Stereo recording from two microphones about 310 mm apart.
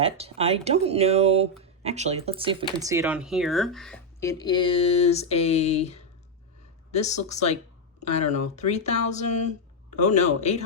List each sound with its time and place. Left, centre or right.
0.0 s speech: centre; by 10.6 s left